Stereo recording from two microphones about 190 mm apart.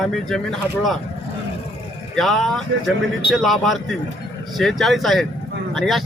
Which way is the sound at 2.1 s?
Centre (ahead or behind).